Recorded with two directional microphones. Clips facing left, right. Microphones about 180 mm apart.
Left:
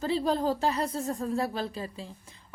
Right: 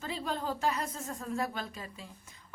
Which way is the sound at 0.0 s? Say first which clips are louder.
Left 9 dB; 35° left (ahead or behind).